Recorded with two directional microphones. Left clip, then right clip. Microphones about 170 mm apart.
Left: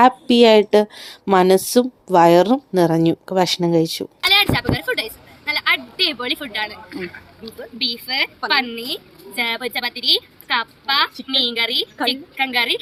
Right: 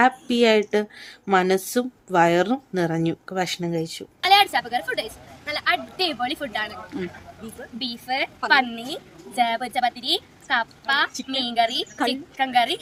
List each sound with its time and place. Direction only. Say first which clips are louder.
0.0 s a woman's voice: left 6 dB; 30° left (ahead or behind)
4.2 s a woman's voice: left 1 dB; 10° right (ahead or behind)